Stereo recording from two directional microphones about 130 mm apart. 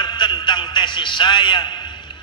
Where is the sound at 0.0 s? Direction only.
35° left (ahead or behind).